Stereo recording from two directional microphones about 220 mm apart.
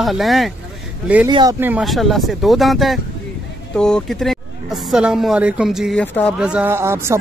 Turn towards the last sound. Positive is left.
turn(degrees=-10)  # may be behind; listen again after turning